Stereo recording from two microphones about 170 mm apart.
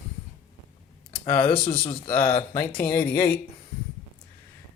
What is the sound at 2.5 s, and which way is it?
Speech, 15° left (ahead or behind).